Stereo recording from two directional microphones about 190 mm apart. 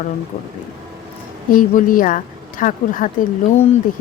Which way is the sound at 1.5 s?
45° left (ahead or behind).